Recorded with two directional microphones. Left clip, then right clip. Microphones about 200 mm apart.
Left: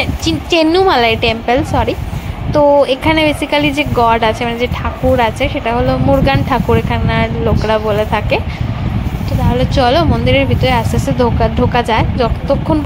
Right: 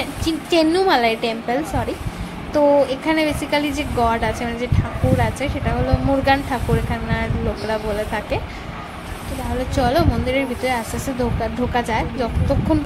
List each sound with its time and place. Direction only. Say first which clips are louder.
0.0 s a woman's voice: left 7 dB; 15° left (ahead or behind)
9.8 s a woman's voice: left 6 dB; 15° left (ahead or behind)